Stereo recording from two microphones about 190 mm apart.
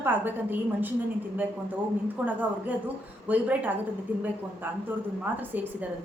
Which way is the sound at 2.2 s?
10° right (ahead or behind).